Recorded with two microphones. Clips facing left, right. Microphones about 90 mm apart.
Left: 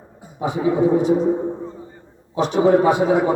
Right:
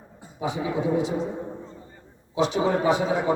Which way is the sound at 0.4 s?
40° left (ahead or behind).